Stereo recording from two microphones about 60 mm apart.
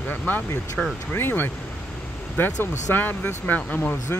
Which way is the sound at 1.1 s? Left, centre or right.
Left.